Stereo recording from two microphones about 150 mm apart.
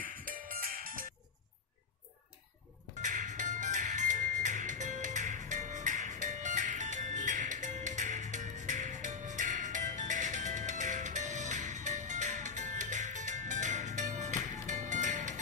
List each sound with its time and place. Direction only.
0.0 s music: 65° right (ahead or behind)
3.0 s music: 55° right (ahead or behind)